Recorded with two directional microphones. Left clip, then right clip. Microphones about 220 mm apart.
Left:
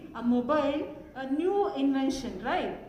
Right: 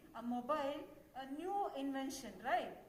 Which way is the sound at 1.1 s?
45° right (ahead or behind).